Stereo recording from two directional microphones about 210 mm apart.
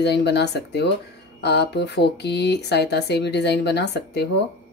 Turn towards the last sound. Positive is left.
turn(degrees=55)  # may be behind; listen again after turning